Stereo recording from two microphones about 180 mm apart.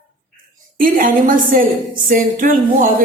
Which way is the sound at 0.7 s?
50° right (ahead or behind).